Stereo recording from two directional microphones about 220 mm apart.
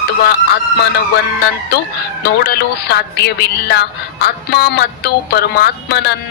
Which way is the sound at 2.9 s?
45° left (ahead or behind).